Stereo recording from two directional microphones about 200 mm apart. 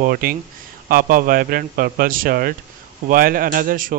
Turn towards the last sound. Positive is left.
turn(degrees=-45)  # may be behind; listen again after turning